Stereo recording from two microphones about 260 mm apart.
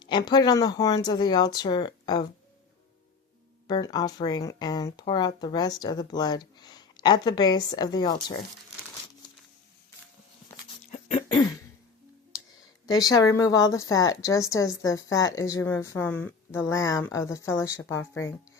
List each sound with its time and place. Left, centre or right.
0.0 s a woman's voice: centre
3.7 s a woman's voice: centre
10.9 s cough: left
12.8 s a woman's voice: centre